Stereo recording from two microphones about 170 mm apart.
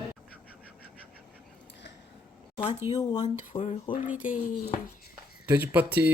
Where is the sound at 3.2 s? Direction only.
40° left (ahead or behind).